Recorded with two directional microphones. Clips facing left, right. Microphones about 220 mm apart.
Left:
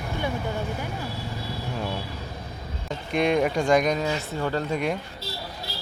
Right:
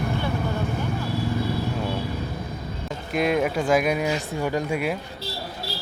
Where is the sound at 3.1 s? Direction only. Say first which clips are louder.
Even; 5° right (ahead or behind).